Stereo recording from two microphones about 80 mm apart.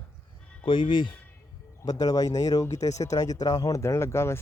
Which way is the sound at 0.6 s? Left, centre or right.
Left.